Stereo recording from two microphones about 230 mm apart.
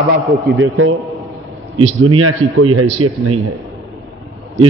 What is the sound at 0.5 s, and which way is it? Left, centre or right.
Speech, right.